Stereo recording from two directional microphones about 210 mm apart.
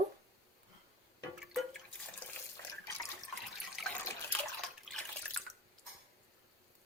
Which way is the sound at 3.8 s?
Centre (ahead or behind).